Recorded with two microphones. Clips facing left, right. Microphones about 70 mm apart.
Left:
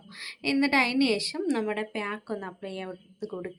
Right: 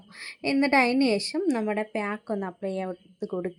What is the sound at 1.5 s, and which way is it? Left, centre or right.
Speech, centre.